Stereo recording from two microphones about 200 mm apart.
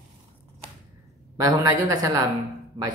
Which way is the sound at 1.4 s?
15° right (ahead or behind).